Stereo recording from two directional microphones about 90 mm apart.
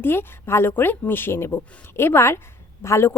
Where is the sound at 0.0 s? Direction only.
25° left (ahead or behind).